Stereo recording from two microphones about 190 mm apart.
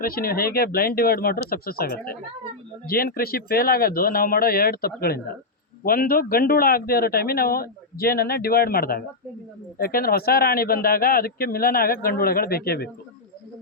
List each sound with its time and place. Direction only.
0.0 s a man's voice: 50° left (ahead or behind)